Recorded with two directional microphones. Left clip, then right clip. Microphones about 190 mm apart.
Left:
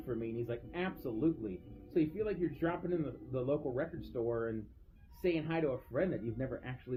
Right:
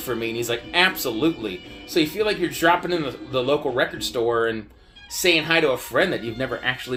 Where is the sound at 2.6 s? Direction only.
15° right (ahead or behind).